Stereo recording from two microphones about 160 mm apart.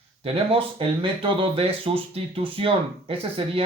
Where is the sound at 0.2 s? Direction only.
35° right (ahead or behind).